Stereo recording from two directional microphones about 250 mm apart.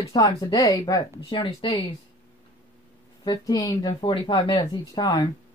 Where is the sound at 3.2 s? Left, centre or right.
Centre.